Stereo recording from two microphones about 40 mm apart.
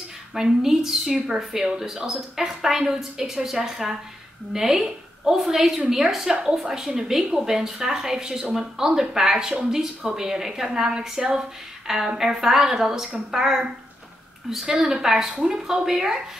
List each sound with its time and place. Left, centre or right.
0.3 s a woman's voice: centre
1.1 s a woman's voice: right
8.3 s speech: right
8.5 s a woman's voice: centre
14.8 s a woman's voice: centre